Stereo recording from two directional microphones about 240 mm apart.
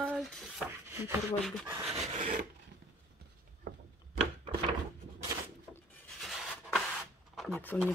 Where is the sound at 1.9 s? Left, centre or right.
Right.